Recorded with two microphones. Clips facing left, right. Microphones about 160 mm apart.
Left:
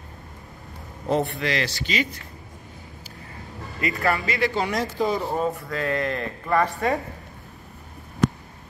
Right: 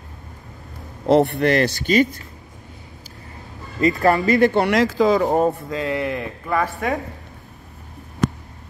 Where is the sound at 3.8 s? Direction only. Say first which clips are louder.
Right 8 dB; 40° right (ahead or behind).